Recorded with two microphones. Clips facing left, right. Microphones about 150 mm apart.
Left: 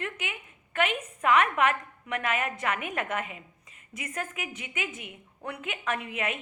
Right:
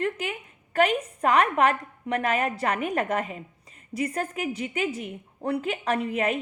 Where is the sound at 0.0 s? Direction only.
35° right (ahead or behind).